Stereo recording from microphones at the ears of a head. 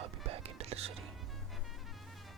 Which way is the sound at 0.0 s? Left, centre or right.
Right.